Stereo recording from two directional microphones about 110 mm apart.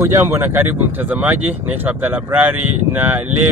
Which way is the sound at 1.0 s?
15° right (ahead or behind).